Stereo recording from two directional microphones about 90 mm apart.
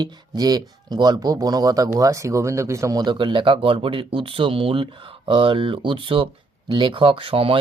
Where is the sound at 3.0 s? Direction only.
60° right (ahead or behind).